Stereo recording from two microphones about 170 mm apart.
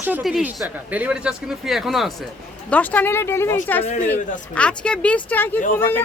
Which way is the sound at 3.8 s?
40° left (ahead or behind).